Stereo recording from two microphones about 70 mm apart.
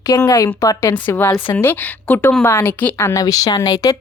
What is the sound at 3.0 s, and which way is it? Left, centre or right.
Speech, left.